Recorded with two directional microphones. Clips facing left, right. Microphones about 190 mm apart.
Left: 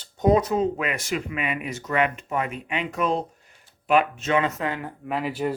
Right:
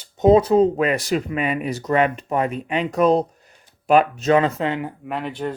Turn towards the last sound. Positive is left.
turn(degrees=5)  # may be behind; listen again after turning